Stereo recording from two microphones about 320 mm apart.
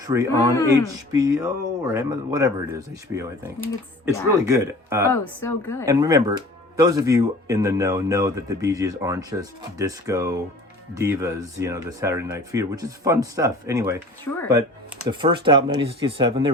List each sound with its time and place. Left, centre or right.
0.0 s a man's voice: centre
5.0 s speech: centre
5.8 s a man's voice: centre
14.3 s speech: left
15.2 s a man's voice: centre